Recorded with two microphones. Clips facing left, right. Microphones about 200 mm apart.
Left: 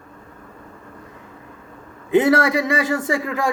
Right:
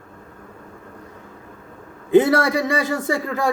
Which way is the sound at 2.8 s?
35° right (ahead or behind).